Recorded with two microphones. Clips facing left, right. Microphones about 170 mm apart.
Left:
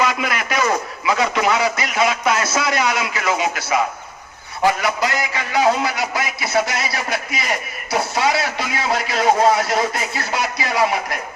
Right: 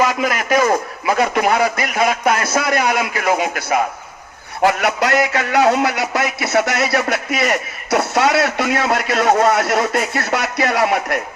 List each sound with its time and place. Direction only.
0.0 s a man's voice: 45° right (ahead or behind)
4.6 s a man's voice: 65° right (ahead or behind)